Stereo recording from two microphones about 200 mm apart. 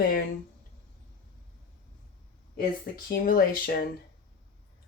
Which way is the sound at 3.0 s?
50° left (ahead or behind).